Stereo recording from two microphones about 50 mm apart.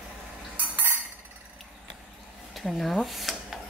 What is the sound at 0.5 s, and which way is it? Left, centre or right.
Dishes, right.